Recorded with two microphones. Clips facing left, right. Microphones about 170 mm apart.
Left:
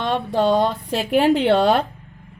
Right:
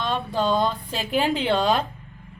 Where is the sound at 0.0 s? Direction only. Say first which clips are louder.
Left 5 dB; 70° left (ahead or behind).